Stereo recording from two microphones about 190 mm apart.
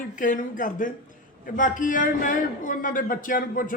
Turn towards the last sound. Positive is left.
turn(degrees=45)  # may be behind; listen again after turning